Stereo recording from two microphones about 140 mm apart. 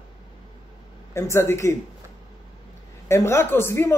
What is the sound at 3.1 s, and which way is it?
Speech, 20° left (ahead or behind).